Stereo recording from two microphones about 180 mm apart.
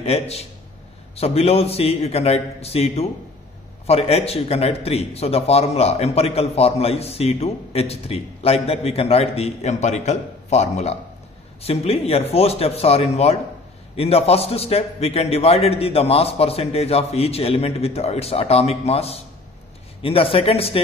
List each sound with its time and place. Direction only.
0.0 s a man's voice: 35° left (ahead or behind)